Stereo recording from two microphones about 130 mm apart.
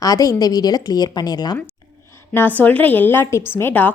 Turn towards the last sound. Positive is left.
turn(degrees=15)  # may be behind; listen again after turning